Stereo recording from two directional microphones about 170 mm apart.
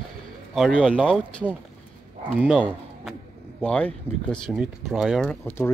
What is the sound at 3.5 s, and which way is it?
Speech, 5° left (ahead or behind).